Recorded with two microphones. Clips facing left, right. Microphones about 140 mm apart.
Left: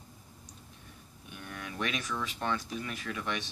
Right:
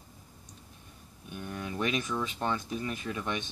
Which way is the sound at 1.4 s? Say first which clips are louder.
Right 4 dB; 25° right (ahead or behind).